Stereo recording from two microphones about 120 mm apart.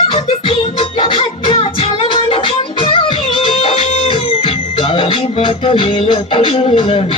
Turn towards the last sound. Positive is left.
turn(degrees=45)  # may be behind; listen again after turning